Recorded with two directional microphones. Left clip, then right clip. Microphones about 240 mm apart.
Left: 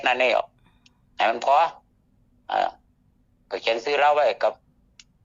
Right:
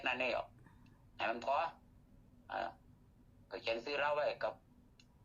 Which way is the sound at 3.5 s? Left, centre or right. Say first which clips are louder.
Left 16 dB; left.